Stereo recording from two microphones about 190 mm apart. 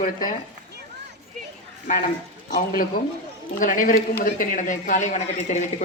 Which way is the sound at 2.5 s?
50° left (ahead or behind).